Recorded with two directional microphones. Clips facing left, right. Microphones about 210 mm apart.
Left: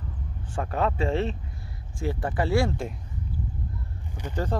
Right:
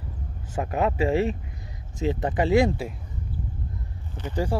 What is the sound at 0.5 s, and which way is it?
Speech, 10° right (ahead or behind).